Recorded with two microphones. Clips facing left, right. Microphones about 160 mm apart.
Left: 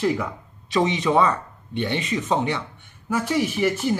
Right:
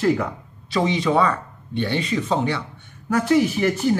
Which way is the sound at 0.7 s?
20° left (ahead or behind).